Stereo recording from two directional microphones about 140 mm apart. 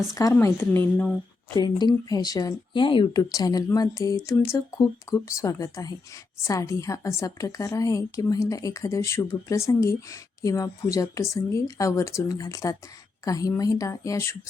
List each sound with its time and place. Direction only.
0.1 s a woman's voice: 25° left (ahead or behind)
1.5 s a woman's voice: 30° left (ahead or behind)